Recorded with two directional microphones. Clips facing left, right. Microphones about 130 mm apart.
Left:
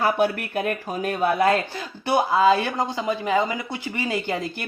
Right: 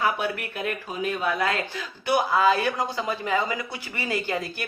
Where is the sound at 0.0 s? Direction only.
40° left (ahead or behind).